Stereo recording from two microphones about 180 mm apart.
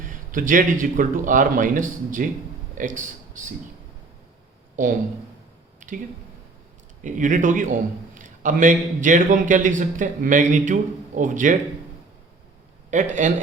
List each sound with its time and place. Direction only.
0.0 s a man's voice: 50° right (ahead or behind)
4.8 s a man's voice: 45° right (ahead or behind)
5.8 s a sound: 45° right (ahead or behind)
7.0 s a man's voice: 45° right (ahead or behind)
12.9 s a man's voice: 40° right (ahead or behind)